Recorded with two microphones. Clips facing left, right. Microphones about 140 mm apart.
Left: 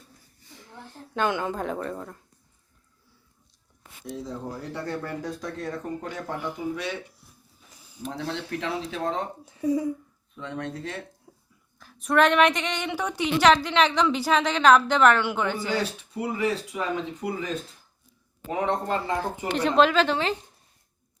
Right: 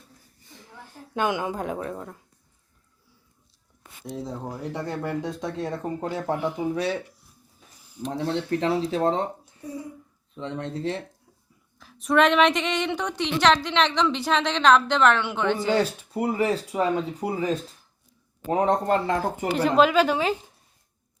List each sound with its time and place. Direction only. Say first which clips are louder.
0.7 s a woman's voice: right 1 dB; 10° right (ahead or behind)
4.1 s speech: right 1 dB; 25° right (ahead or behind)
6.3 s a woman's voice: right 5 dB; centre (ahead or behind)
8.1 s speech: right 6 dB; 35° right (ahead or behind)
9.5 s speech: left 11 dB; 90° left
10.3 s speech: right 2 dB; 25° right (ahead or behind)
11.3 s a sound: left 6 dB; 25° left (ahead or behind)
11.8 s a woman's voice: right 1 dB; centre (ahead or behind)
16.1 s speech: right 3 dB; 40° right (ahead or behind)
18.9 s speech: right 4 dB; 50° right (ahead or behind)
19.5 s a woman's voice: right 1 dB; 5° right (ahead or behind)